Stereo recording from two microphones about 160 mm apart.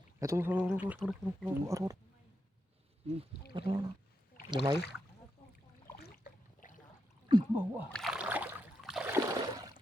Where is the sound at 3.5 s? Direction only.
30° right (ahead or behind).